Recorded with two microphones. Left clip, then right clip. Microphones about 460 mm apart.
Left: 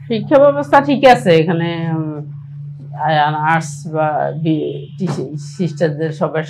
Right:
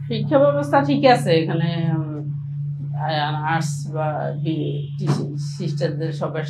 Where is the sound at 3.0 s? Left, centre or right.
Left.